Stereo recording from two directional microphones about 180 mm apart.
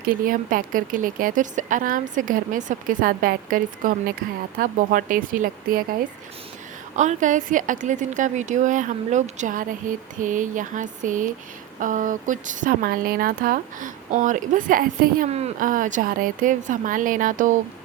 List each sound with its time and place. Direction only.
0.1 s a woman's voice: 50° right (ahead or behind)
6.9 s a woman's voice: 40° right (ahead or behind)
15.3 s a woman's voice: 35° right (ahead or behind)